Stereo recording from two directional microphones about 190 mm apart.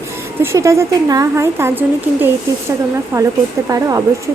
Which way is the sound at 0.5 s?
15° right (ahead or behind).